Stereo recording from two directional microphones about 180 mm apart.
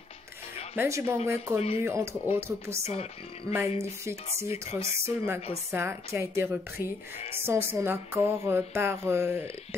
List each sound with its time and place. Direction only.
0.7 s music: 15° right (ahead or behind)
2.9 s a woman's voice: 35° left (ahead or behind)
3.5 s music: 15° right (ahead or behind)